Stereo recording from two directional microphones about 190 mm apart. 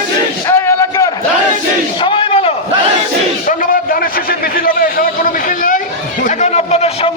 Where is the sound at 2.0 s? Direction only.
25° left (ahead or behind).